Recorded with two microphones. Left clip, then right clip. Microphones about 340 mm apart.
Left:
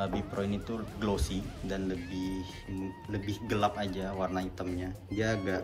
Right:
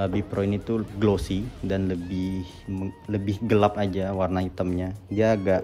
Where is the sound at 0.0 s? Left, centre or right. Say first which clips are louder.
Right 7 dB; right.